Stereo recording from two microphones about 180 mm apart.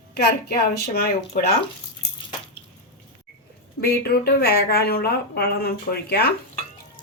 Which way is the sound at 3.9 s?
60° left (ahead or behind).